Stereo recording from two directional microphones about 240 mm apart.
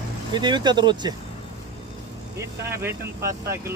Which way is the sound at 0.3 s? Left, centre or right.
Centre.